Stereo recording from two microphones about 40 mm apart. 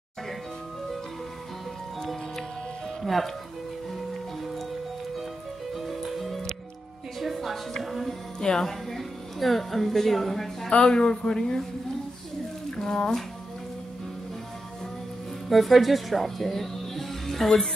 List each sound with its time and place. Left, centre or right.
3.0 s music: centre
5.8 s music: centre
8.4 s speech: centre
8.9 s a woman's voice: centre
10.9 s a man's voice: centre
12.7 s music: centre
15.5 s speech: centre